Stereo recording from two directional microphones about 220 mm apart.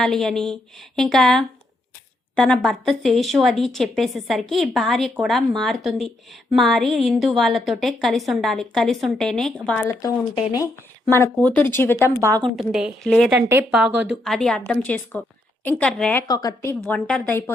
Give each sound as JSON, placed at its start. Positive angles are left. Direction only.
{"t": 0.0, "sound": "a woman's voice", "side_deg": 0}
{"t": 9.8, "sound": "speech", "side_deg": 15}
{"t": 11.1, "sound": "a woman's voice", "side_deg": 10}
{"t": 16.2, "sound": "speech", "side_deg": 15}
{"t": 16.9, "sound": "speech", "side_deg": 5}